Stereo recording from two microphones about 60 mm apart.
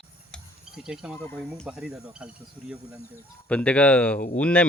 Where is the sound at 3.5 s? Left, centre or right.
Left.